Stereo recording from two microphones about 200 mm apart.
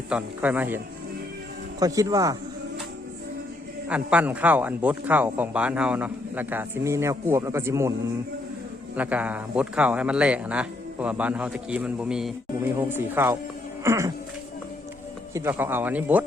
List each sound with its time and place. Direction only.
0.1 s speech: 10° right (ahead or behind)
1.8 s speech: 20° right (ahead or behind)
3.8 s speech: 5° right (ahead or behind)
9.0 s speech: 5° right (ahead or behind)
15.3 s speech: 15° right (ahead or behind)